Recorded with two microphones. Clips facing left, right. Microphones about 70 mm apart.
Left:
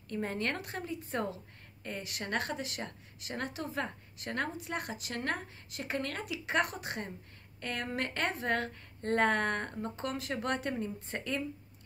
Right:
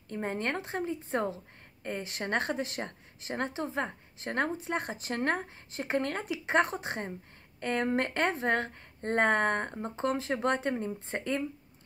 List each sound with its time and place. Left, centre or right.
0.1 s a woman's voice: right